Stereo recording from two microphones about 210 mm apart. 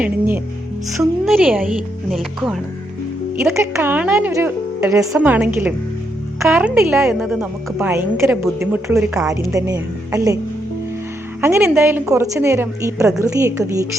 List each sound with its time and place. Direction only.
0.0 s a woman's voice: 10° right (ahead or behind)
3.3 s a woman's voice: 10° right (ahead or behind)
9.3 s a woman's voice: 15° right (ahead or behind)
11.3 s a woman's voice: 10° right (ahead or behind)